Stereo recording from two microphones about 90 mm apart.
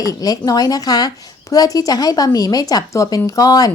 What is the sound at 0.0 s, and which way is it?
A woman's voice, 40° left (ahead or behind).